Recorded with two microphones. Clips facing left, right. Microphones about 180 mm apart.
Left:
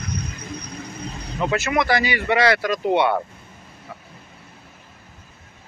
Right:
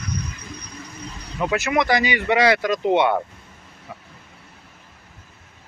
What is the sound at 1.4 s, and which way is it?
Speech, 15° right (ahead or behind).